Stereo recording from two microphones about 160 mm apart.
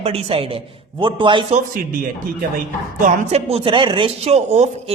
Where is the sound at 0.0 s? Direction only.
40° right (ahead or behind).